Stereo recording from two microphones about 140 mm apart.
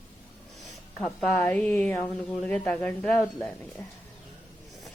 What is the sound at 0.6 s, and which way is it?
A woman's voice, 5° left (ahead or behind).